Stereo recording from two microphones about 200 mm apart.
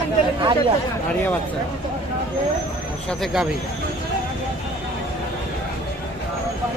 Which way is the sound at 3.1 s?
Centre (ahead or behind).